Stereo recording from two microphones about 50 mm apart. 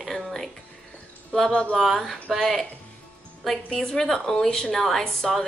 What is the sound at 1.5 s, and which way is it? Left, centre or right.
Speech, centre.